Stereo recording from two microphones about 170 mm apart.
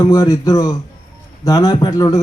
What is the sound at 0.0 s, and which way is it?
A man's voice, 20° left (ahead or behind).